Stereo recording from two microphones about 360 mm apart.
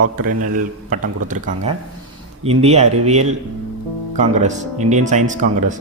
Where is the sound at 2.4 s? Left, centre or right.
Centre.